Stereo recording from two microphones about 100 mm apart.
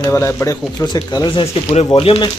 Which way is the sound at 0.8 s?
40° left (ahead or behind).